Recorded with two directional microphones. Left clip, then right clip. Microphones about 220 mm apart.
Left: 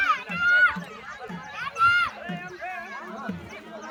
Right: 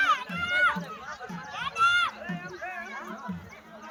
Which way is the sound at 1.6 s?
40° right (ahead or behind).